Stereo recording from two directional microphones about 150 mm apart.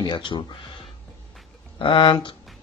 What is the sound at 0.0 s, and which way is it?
Speech, 30° left (ahead or behind).